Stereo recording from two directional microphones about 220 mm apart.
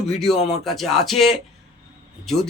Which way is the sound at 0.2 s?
Centre (ahead or behind).